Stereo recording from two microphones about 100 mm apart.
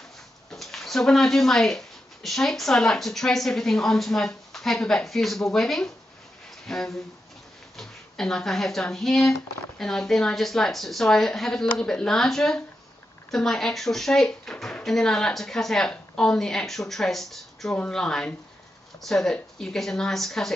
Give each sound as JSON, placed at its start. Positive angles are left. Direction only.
{"t": 0.5, "sound": "speech", "side_deg": 5}